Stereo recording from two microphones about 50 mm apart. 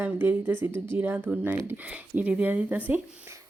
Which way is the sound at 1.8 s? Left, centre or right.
Right.